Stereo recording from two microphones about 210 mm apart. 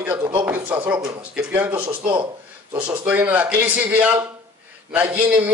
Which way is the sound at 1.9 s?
25° right (ahead or behind).